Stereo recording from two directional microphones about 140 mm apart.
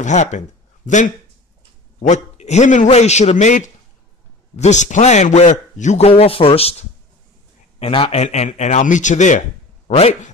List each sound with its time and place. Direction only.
0.0 s a man's voice: 60° left (ahead or behind)